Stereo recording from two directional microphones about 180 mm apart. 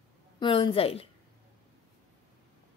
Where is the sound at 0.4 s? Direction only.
30° left (ahead or behind).